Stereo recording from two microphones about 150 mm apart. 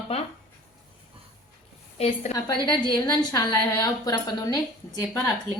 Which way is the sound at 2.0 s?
45° left (ahead or behind).